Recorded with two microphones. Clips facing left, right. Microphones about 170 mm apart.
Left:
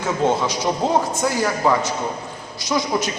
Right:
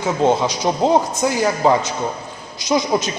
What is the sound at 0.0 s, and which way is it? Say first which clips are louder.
A man's voice: right 3 dB; 15° right (ahead or behind).